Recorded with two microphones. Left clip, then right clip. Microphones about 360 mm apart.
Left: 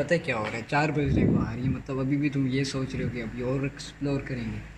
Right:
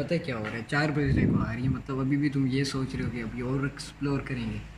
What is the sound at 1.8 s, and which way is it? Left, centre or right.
Speech, centre.